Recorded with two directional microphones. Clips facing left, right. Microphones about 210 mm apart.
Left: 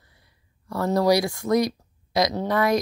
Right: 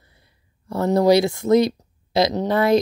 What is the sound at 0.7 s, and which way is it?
Speech, 25° right (ahead or behind).